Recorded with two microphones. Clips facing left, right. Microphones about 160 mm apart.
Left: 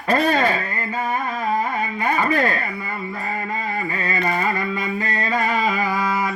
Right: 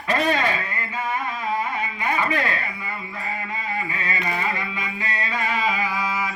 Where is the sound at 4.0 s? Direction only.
45° left (ahead or behind).